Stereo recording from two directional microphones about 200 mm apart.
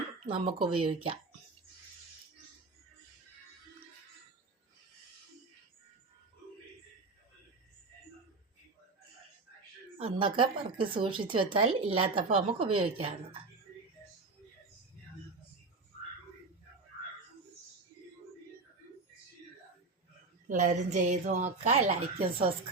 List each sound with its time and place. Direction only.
0.3 s speech: 25° right (ahead or behind)
10.0 s speech: 25° right (ahead or behind)
20.5 s a woman's voice: 40° right (ahead or behind)